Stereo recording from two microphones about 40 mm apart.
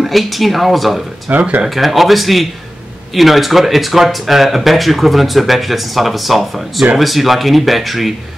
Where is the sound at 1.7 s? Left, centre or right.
Centre.